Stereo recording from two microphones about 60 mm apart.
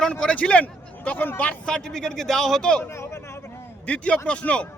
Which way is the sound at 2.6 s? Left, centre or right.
Centre.